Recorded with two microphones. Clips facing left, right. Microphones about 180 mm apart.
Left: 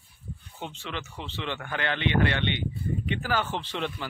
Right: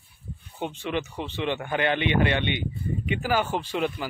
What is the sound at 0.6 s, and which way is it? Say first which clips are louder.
Speech: right 8 dB; 15° right (ahead or behind).